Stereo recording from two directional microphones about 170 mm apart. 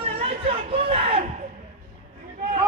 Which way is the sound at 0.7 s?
35° right (ahead or behind).